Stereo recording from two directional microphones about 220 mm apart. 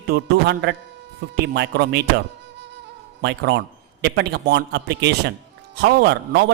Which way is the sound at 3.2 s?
50° right (ahead or behind).